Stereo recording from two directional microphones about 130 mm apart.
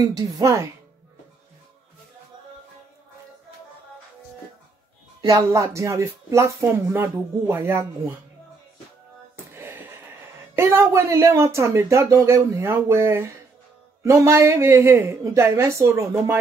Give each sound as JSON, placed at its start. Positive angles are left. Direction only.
{"t": 0.0, "sound": "speech", "side_deg": -25}
{"t": 5.3, "sound": "speech", "side_deg": -25}
{"t": 9.5, "sound": "a sound", "side_deg": -15}
{"t": 10.5, "sound": "speech", "side_deg": -20}